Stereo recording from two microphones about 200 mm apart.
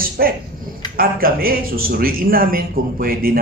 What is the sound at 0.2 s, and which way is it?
Speech, 50° right (ahead or behind).